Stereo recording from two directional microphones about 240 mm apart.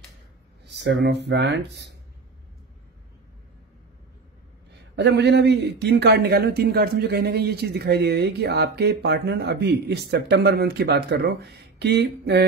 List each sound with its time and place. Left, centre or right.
0.7 s a man's voice: right
4.9 s a man's voice: right